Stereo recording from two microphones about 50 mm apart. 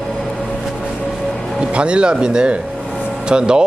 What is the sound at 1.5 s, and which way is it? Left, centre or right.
A man's voice, right.